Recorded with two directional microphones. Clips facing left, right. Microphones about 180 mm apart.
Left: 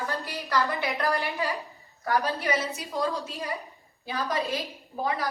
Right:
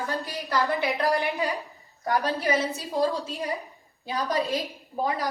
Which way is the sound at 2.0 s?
30° right (ahead or behind).